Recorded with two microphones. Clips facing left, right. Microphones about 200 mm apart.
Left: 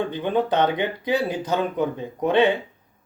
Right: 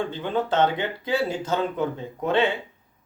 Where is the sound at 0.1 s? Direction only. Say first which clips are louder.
Left 3 dB; 15° left (ahead or behind).